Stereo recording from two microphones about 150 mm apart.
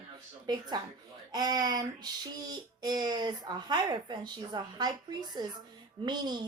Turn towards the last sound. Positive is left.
turn(degrees=-30)  # may be behind; listen again after turning